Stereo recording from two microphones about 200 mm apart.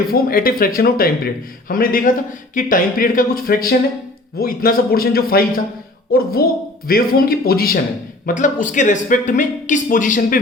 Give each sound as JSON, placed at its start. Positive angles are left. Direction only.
{"t": 0.1, "sound": "a man's voice", "side_deg": 45}